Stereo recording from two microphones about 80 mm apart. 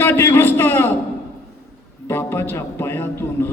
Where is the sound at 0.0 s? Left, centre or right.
Left.